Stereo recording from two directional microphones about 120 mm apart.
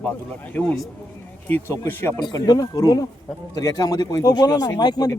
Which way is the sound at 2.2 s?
35° left (ahead or behind).